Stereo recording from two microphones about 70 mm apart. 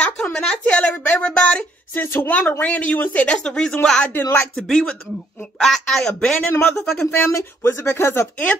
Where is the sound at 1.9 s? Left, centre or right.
Left; by 4.0 s centre.